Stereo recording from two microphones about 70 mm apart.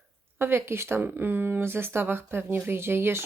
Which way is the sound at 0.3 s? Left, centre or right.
Right.